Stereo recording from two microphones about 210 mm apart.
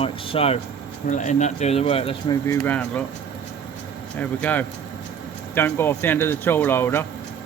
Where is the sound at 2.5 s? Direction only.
10° left (ahead or behind).